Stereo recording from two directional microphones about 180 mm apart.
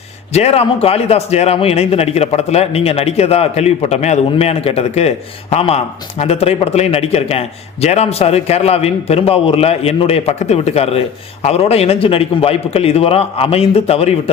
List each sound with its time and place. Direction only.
0.3 s a man's voice: 35° left (ahead or behind)